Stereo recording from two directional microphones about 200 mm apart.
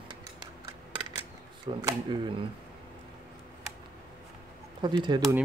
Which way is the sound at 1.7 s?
25° right (ahead or behind).